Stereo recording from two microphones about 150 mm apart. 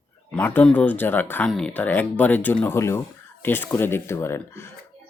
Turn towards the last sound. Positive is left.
turn(degrees=15)  # may be behind; listen again after turning